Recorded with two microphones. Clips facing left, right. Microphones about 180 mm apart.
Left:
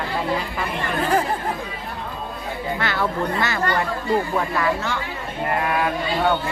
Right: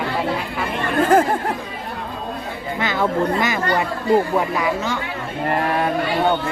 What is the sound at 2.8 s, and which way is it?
Speech, 15° right (ahead or behind).